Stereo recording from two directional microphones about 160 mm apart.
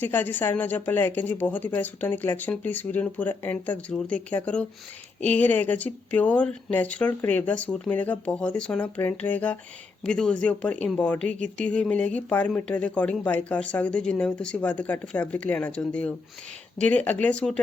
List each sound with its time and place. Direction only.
0.0 s speech: 10° left (ahead or behind)
11.3 s speech: 50° right (ahead or behind)
11.6 s speech: 5° left (ahead or behind)